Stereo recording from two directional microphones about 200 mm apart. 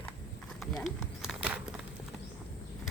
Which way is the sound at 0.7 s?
Centre (ahead or behind).